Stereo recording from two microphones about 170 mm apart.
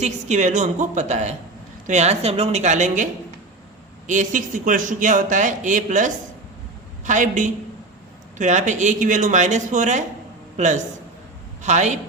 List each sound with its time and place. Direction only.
0.0 s a man's voice: 45° right (ahead or behind)